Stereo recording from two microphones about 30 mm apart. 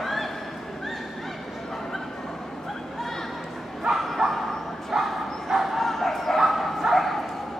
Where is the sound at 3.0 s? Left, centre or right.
Centre.